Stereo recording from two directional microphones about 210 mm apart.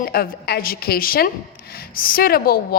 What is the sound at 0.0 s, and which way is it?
A woman's voice, 45° left (ahead or behind).